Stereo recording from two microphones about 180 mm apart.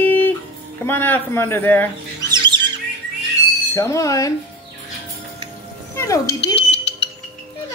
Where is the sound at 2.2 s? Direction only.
25° right (ahead or behind).